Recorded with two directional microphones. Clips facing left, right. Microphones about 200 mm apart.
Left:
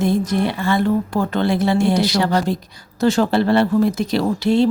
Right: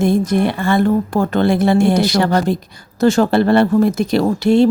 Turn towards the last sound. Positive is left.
turn(degrees=-50)  # may be behind; listen again after turning